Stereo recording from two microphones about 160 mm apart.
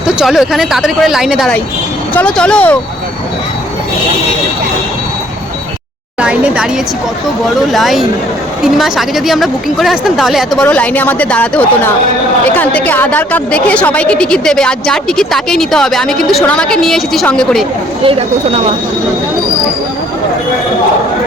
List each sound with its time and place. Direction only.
0.2 s a woman's voice: centre (ahead or behind)
6.1 s a woman's voice: 5° right (ahead or behind)
7.7 s a woman's voice: centre (ahead or behind)
18.0 s speech: 35° right (ahead or behind)